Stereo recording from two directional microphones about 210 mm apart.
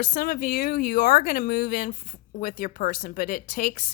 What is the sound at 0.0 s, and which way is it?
Speech, 45° left (ahead or behind).